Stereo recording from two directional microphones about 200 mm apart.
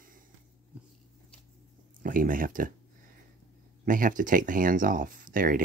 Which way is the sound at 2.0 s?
45° right (ahead or behind).